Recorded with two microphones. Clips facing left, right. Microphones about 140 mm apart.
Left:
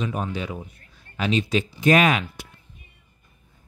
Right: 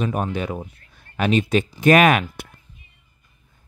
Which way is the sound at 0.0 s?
55° right (ahead or behind).